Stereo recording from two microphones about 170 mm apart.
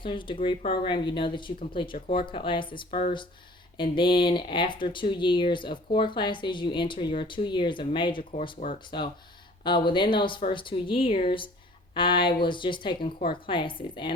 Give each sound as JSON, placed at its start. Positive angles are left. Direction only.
{"t": 0.0, "sound": "speech", "side_deg": 30}